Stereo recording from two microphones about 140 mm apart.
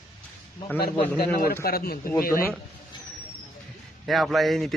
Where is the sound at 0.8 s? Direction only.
90° left.